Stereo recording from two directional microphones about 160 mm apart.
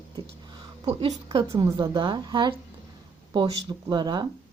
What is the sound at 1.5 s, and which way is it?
A woman's voice, 30° right (ahead or behind).